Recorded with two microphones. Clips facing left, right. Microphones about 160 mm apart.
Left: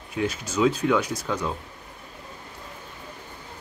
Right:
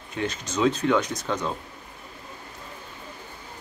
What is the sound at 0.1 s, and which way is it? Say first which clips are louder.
Speech: left 2 dB; 10° left (ahead or behind).